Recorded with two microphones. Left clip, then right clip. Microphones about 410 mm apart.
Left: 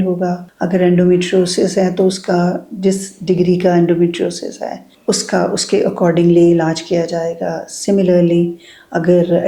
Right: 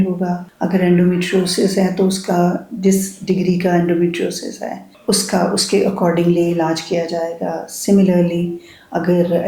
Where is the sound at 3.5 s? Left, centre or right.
Left.